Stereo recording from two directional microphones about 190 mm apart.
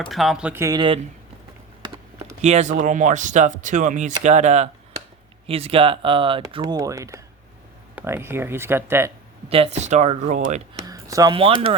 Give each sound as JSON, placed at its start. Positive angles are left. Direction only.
{"t": 0.1, "sound": "speech", "side_deg": 0}
{"t": 2.4, "sound": "speech", "side_deg": -35}
{"t": 9.5, "sound": "speech", "side_deg": -35}
{"t": 10.8, "sound": "a sound", "side_deg": -15}
{"t": 11.3, "sound": "speech", "side_deg": -30}